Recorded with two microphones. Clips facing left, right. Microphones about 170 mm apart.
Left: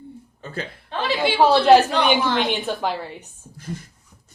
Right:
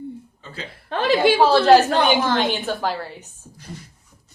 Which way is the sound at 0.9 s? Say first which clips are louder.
Right 6 dB; 45° right (ahead or behind).